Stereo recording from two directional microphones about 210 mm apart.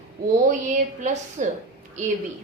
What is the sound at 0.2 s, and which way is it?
Speech, 45° right (ahead or behind).